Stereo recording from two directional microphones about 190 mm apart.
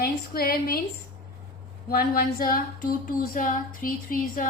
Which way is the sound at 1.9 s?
50° left (ahead or behind).